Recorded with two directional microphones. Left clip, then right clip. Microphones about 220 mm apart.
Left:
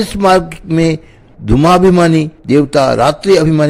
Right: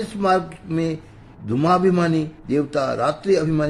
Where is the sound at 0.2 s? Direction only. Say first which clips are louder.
Left 9 dB; 40° left (ahead or behind).